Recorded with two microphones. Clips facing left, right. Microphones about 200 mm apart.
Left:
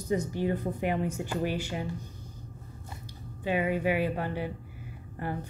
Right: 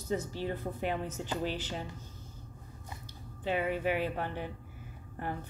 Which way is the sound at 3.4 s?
10° left (ahead or behind).